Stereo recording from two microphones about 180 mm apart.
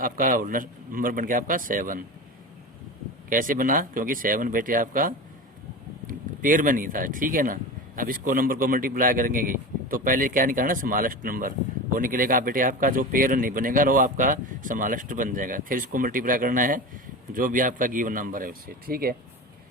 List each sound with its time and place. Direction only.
0.0 s speech: 50° right (ahead or behind)
3.2 s speech: 50° right (ahead or behind)